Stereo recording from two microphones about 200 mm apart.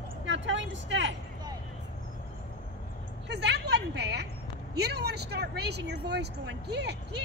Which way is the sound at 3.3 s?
60° right (ahead or behind).